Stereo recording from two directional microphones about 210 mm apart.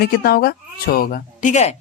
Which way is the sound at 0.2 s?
45° left (ahead or behind).